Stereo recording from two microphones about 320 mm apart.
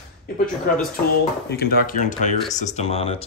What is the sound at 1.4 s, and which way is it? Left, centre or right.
Speech, left.